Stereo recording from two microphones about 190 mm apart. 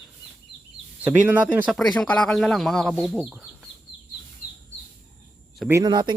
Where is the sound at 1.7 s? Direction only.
5° left (ahead or behind).